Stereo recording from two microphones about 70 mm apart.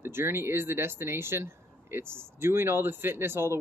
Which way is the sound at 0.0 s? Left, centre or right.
Right.